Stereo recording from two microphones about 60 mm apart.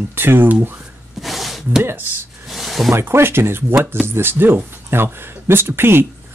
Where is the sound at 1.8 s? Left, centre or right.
Right.